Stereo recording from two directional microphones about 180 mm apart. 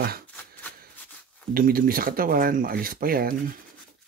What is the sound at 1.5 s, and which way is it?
Speech, 55° right (ahead or behind).